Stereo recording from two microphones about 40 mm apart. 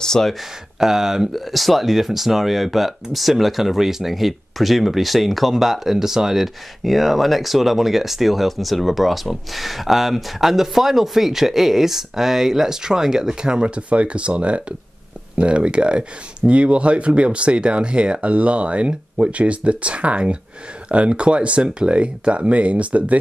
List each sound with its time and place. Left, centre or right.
0.0 s speech: centre
0.7 s speech: centre
1.3 s speech: centre; by 23.1 s right